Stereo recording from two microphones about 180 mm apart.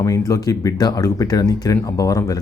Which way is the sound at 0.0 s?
20° left (ahead or behind).